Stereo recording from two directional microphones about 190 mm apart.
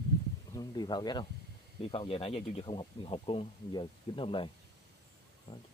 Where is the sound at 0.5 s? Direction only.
20° left (ahead or behind).